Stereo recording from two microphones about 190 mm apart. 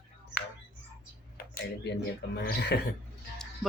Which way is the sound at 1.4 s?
50° left (ahead or behind).